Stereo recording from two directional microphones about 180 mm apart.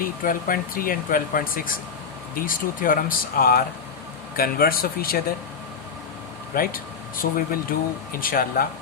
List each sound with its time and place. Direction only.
0.0 s speech: 50° left (ahead or behind)
6.5 s speech: 55° left (ahead or behind)